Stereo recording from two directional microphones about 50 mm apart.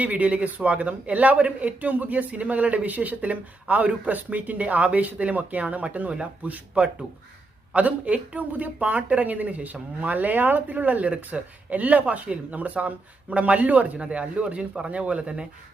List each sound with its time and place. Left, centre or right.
0.0 s speech: right